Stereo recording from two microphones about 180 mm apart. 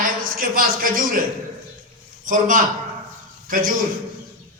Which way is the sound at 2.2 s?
45° right (ahead or behind).